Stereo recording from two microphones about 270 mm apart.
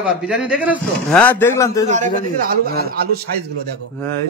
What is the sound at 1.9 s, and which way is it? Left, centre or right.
A man's voice, right.